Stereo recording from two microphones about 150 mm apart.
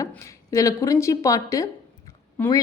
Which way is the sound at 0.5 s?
20° left (ahead or behind).